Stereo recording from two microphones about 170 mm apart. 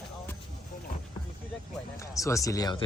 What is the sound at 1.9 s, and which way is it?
Speech, 20° left (ahead or behind).